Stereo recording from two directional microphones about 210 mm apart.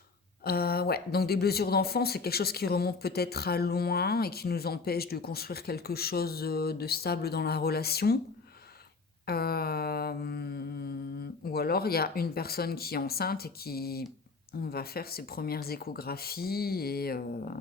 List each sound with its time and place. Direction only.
0.4 s speech: 45° left (ahead or behind)
9.2 s speech: 45° left (ahead or behind)